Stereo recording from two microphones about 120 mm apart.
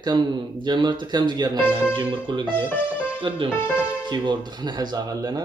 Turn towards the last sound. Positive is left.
turn(degrees=-30)  # may be behind; listen again after turning